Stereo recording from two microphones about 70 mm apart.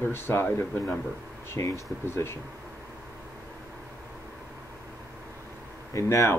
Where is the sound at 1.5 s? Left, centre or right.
Left.